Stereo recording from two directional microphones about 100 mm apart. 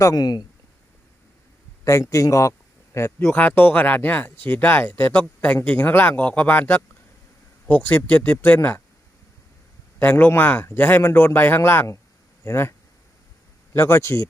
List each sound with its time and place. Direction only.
0.0 s speech: 40° left (ahead or behind)
1.8 s speech: 35° left (ahead or behind); by 8.8 s 15° left (ahead or behind)
10.0 s speech: 20° left (ahead or behind)
13.7 s speech: 25° left (ahead or behind)